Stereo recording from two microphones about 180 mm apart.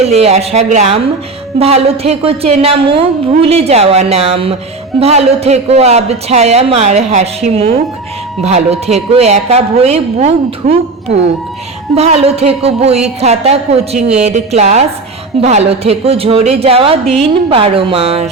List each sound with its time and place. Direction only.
0.0 s a woman's voice: 35° right (ahead or behind)